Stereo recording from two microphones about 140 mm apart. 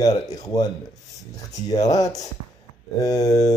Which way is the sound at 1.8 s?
25° left (ahead or behind).